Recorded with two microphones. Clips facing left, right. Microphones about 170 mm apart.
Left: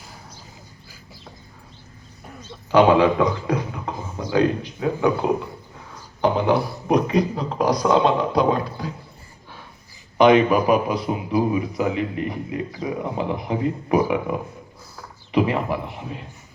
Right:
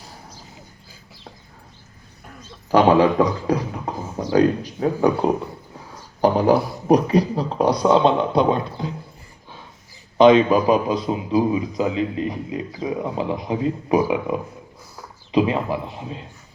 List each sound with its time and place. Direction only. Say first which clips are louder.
2.6 s speech: even; 40° right (ahead or behind)
6.2 s a man's voice: right 3 dB; 40° right (ahead or behind)
10.2 s a man's voice: right 2 dB; 20° right (ahead or behind)